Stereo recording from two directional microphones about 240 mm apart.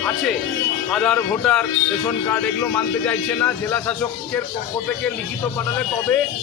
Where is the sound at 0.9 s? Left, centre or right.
Centre.